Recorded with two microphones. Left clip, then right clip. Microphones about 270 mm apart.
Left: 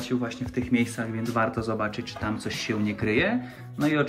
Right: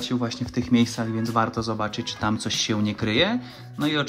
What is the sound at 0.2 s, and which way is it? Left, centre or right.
Speech, right.